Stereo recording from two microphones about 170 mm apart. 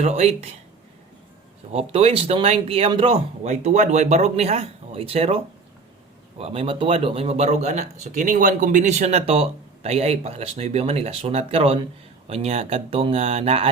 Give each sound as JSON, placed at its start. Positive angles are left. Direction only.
{"t": 0.0, "sound": "speech", "side_deg": -40}
{"t": 1.7, "sound": "speech", "side_deg": -35}
{"t": 6.4, "sound": "speech", "side_deg": -35}